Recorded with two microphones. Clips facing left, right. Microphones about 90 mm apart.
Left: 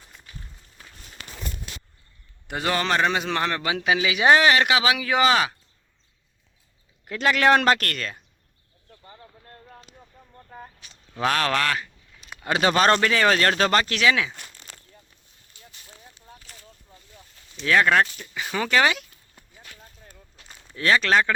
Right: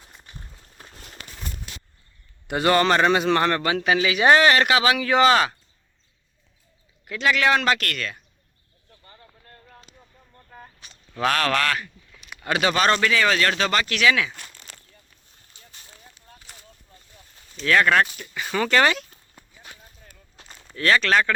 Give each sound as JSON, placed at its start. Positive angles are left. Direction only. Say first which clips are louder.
{"t": 2.5, "sound": "a man's voice", "louder": "right 5 dB", "side_deg": 0}
{"t": 7.0, "sound": "speech", "louder": "left 1 dB", "side_deg": 40}
{"t": 10.3, "sound": "a sound", "louder": "left 3 dB", "side_deg": 15}
{"t": 11.2, "sound": "a man's voice", "louder": "right 1 dB", "side_deg": 20}
{"t": 15.6, "sound": "a sound", "louder": "left 3 dB", "side_deg": -25}
{"t": 15.9, "sound": "a sound", "louder": "left 5 dB", "side_deg": 15}
{"t": 17.6, "sound": "a man's voice", "louder": "right 1 dB", "side_deg": 15}
{"t": 19.4, "sound": "clip-clop", "louder": "right 2 dB", "side_deg": -20}
{"t": 20.7, "sound": "a man's voice", "louder": "even", "side_deg": 20}